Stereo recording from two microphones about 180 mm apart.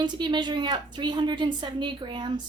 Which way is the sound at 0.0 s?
25° right (ahead or behind).